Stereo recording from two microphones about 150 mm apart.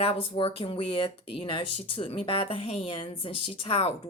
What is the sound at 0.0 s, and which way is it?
Speech, 40° left (ahead or behind).